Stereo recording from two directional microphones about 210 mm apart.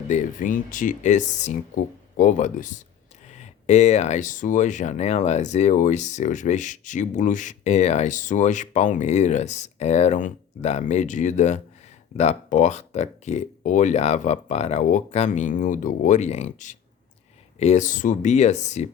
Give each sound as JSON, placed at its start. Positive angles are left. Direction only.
{"t": 0.1, "sound": "speech", "side_deg": 40}